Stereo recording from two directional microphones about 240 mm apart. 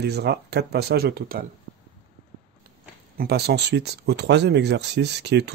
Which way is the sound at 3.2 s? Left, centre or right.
Right.